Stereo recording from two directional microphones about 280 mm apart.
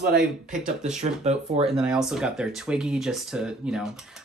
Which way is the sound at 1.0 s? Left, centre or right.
Right.